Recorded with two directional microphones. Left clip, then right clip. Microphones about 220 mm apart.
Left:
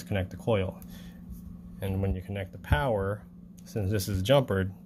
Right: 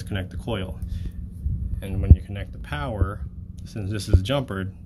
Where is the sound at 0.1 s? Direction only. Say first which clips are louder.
Left 2 dB; 10° left (ahead or behind).